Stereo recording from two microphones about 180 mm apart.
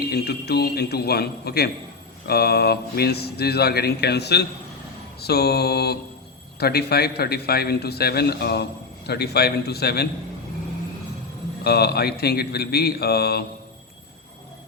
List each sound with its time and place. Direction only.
0.1 s speech: 65° left (ahead or behind)
11.6 s speech: 60° left (ahead or behind)